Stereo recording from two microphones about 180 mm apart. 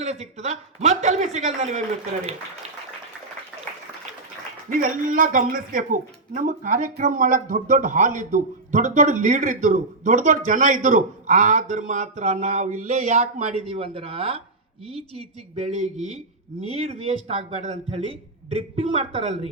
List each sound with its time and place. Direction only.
0.0 s speech: 35° right (ahead or behind)
4.7 s speech: 45° right (ahead or behind); by 19.5 s 30° right (ahead or behind)